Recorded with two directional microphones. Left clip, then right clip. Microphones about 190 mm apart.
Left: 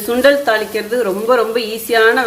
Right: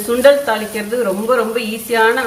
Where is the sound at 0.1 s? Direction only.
50° left (ahead or behind).